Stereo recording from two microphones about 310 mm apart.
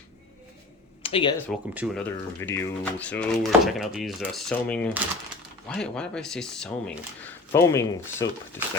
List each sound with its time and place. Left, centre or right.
1.0 s speech: centre
1.5 s speech: centre